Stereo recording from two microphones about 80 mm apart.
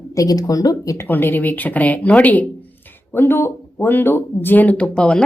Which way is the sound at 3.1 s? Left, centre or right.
Left.